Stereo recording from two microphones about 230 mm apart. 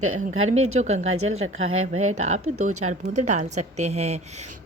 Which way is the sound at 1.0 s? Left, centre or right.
Right.